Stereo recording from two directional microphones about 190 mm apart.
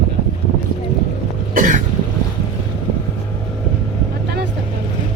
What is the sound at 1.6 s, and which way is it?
Cough, 40° right (ahead or behind).